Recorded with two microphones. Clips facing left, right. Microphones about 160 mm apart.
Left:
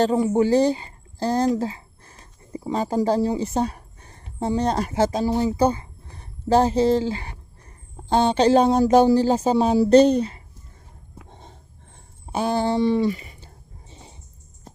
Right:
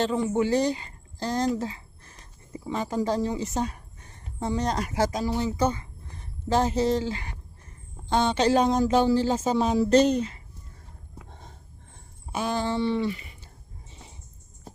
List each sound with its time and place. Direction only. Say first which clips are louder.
0.0 s a woman's voice: left 6 dB; 35° left (ahead or behind)
11.3 s a sound: left 2 dB; 20° left (ahead or behind)
12.2 s speech: left 5 dB; 30° left (ahead or behind)